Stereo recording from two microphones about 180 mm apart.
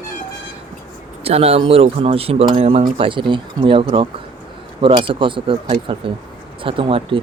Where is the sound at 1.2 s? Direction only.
35° right (ahead or behind).